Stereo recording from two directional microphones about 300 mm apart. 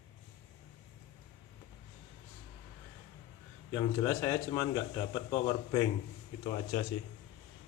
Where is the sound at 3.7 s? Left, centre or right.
Centre.